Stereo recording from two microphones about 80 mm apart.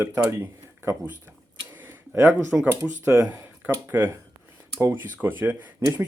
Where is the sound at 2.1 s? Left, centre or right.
Centre.